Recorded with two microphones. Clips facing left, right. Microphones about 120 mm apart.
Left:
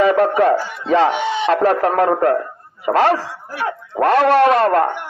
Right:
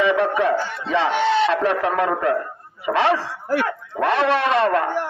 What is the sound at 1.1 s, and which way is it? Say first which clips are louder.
Speech: right 2 dB; 15° left (ahead or behind).